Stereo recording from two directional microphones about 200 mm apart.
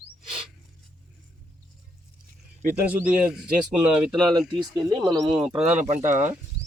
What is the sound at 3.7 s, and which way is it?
A man's voice, 20° right (ahead or behind).